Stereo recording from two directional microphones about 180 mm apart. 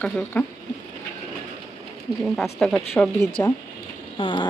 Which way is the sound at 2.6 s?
5° left (ahead or behind).